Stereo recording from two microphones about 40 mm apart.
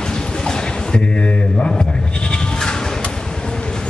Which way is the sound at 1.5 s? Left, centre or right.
Left.